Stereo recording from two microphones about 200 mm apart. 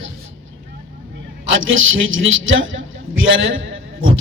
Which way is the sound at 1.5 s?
75° right (ahead or behind).